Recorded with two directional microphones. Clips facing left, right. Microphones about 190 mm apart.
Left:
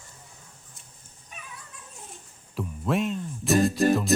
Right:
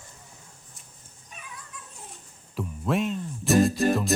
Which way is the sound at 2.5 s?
Centre (ahead or behind).